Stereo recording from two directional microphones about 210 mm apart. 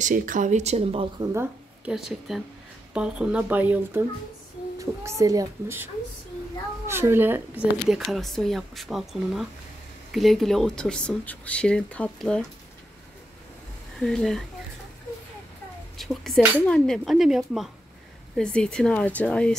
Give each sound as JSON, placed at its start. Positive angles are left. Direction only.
{"t": 0.0, "sound": "speech", "side_deg": -40}
{"t": 1.2, "sound": "a woman's voice", "side_deg": -10}
{"t": 6.9, "sound": "speech", "side_deg": -10}
{"t": 7.9, "sound": "speech", "side_deg": 0}
{"t": 13.9, "sound": "speech", "side_deg": 0}
{"t": 16.0, "sound": "speech", "side_deg": 0}